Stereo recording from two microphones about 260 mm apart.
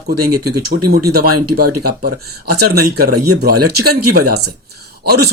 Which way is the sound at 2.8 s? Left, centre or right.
Right.